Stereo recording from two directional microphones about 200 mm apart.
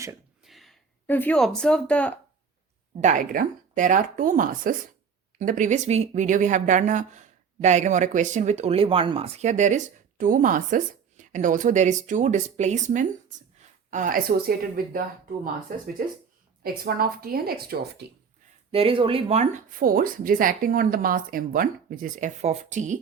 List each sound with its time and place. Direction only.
0.4 s speech: centre (ahead or behind)
3.0 s a woman's voice: 40° right (ahead or behind)
16.6 s a woman's voice: 50° right (ahead or behind)
18.7 s speech: 30° right (ahead or behind)
19.8 s a woman's voice: 45° right (ahead or behind)